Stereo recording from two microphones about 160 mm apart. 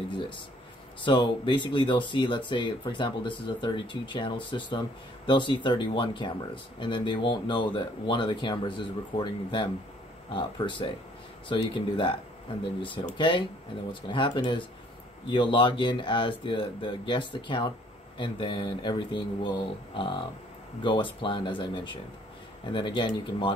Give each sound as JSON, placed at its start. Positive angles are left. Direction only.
{"t": 1.0, "sound": "speech", "side_deg": 30}